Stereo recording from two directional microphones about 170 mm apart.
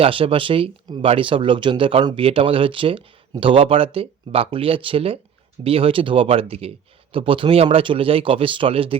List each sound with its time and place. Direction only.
0.0 s speech: 30° right (ahead or behind)